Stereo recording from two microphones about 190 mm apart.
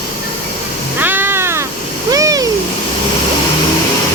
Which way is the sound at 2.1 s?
20° right (ahead or behind).